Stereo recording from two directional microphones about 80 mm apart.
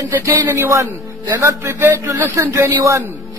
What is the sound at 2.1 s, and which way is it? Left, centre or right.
Speech, right.